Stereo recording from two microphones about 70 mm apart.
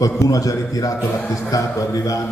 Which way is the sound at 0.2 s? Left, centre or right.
Left.